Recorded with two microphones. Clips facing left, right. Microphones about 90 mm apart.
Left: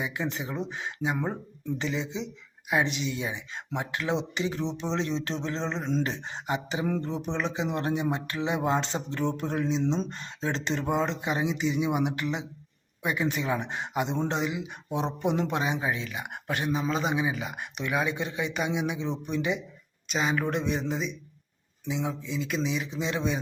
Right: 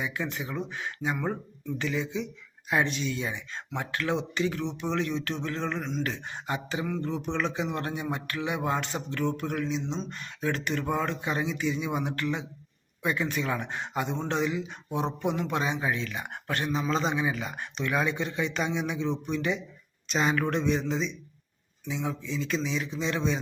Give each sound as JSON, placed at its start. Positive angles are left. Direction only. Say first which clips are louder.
{"t": 0.0, "sound": "speech", "louder": "left 1 dB", "side_deg": 20}
{"t": 20.1, "sound": "speech", "louder": "right 1 dB", "side_deg": 5}